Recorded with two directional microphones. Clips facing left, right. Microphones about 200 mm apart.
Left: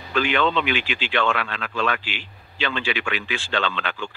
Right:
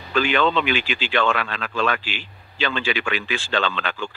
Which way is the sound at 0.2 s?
40° right (ahead or behind).